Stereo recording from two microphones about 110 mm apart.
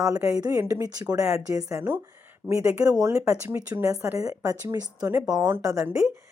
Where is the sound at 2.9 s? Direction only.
35° right (ahead or behind).